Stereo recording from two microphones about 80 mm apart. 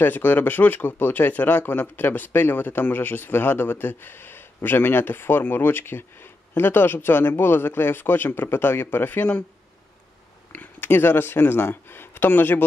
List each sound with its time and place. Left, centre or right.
0.0 s speech: left
10.5 s speech: left